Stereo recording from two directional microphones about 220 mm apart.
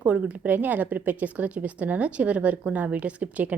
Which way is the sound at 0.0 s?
5° right (ahead or behind).